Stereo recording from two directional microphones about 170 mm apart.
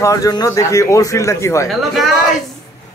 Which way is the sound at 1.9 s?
Centre (ahead or behind).